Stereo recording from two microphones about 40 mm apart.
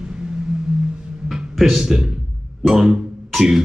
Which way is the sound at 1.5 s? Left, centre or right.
Centre.